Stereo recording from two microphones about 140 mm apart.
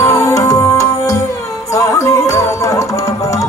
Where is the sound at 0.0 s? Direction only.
20° left (ahead or behind).